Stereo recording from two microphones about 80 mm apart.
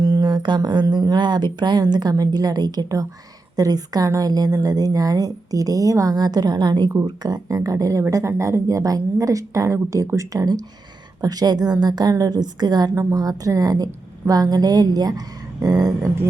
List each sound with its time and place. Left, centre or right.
0.0 s a woman's voice: right
12.9 s a woman's voice: right
13.1 s a woman's voice: right